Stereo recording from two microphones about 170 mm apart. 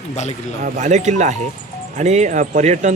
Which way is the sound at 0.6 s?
45° right (ahead or behind).